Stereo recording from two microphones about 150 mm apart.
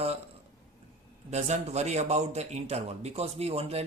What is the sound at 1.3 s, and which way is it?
A man's voice, 45° right (ahead or behind).